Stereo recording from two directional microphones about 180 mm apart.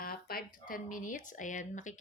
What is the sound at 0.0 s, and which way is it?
Speech, 55° left (ahead or behind).